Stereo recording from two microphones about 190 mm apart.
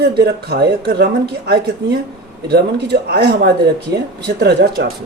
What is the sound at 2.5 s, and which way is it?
A woman's voice, 60° right (ahead or behind).